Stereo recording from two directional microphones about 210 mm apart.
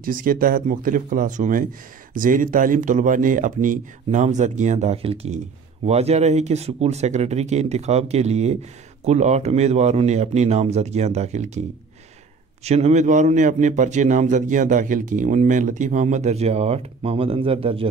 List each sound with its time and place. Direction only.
0.0 s a man's voice: 40° right (ahead or behind)
12.6 s a man's voice: 30° right (ahead or behind)